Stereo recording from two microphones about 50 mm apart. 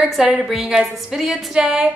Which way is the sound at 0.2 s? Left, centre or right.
Centre.